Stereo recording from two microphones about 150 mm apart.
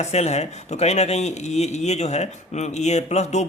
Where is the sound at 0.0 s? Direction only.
45° left (ahead or behind).